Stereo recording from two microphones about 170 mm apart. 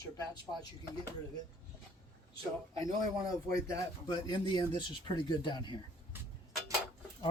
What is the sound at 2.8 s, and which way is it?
Speech, 20° left (ahead or behind).